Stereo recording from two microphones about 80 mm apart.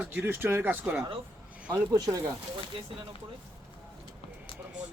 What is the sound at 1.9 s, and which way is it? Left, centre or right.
Speech, right.